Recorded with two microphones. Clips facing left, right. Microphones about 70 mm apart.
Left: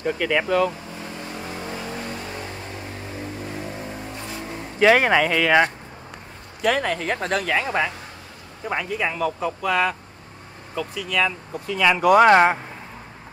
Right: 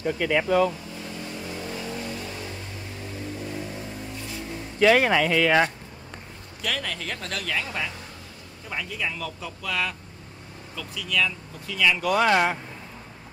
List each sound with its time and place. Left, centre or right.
0.0 s speech: left
0.9 s vehicle: left
4.9 s speech: centre
5.3 s speech: centre
6.6 s speech: left
12.0 s speech: left
12.3 s speech: left